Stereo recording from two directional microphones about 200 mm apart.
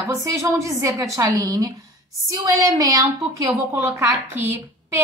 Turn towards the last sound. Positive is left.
turn(degrees=-10)  # may be behind; listen again after turning